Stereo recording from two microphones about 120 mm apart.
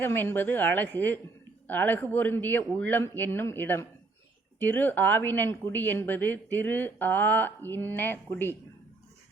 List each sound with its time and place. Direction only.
0.0 s a woman's voice: 15° left (ahead or behind)